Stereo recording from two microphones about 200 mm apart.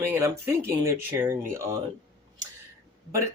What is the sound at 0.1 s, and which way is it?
Speech, 15° right (ahead or behind).